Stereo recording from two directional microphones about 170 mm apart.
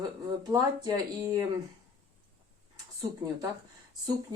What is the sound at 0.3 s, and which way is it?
Speech, 25° right (ahead or behind).